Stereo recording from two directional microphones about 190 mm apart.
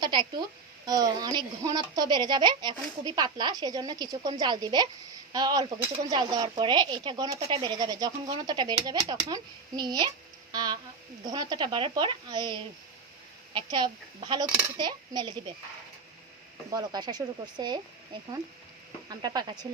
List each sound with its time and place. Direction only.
0.0 s speech: 25° right (ahead or behind)
16.7 s speech: 20° right (ahead or behind)
19.0 s speech: 20° right (ahead or behind)